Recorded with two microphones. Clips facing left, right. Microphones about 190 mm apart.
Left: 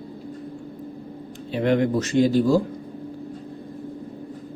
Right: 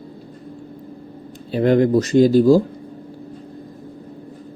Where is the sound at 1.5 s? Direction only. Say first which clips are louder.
Right 6 dB; 40° right (ahead or behind).